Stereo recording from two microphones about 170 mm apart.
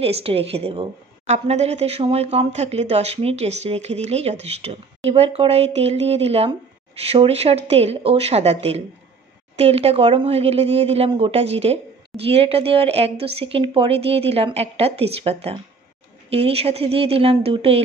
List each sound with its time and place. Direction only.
0.0 s a woman's voice: 35° right (ahead or behind)